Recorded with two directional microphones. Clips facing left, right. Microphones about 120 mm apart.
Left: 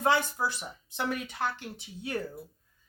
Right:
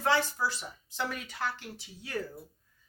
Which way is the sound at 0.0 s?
15° left (ahead or behind).